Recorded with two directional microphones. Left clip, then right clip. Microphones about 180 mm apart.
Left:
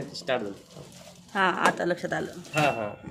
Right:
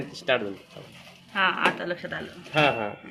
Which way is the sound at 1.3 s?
90° left.